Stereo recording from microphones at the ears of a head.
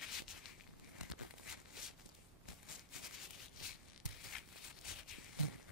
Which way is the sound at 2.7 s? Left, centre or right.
Left.